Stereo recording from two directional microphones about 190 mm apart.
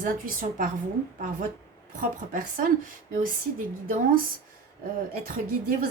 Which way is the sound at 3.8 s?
45° right (ahead or behind).